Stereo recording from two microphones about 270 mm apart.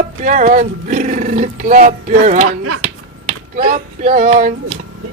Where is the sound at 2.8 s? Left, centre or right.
Right.